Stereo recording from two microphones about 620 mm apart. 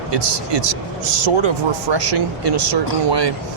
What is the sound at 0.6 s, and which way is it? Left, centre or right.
Speech, right.